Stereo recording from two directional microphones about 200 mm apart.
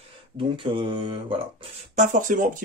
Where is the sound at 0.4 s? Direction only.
25° right (ahead or behind).